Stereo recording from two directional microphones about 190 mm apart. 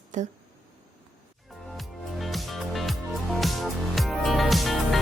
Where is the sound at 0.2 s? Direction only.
40° right (ahead or behind).